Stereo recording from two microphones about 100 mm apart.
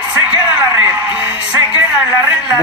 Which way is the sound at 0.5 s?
15° right (ahead or behind).